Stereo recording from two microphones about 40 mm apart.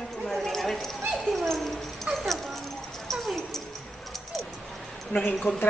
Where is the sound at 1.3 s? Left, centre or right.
Centre.